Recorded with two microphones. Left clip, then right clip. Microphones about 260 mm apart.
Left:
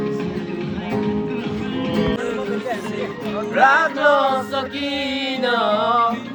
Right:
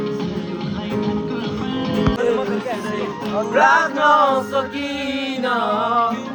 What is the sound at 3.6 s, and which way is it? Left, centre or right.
Music, left.